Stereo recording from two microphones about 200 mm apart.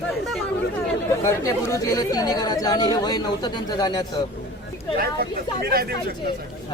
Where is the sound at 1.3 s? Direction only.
15° left (ahead or behind).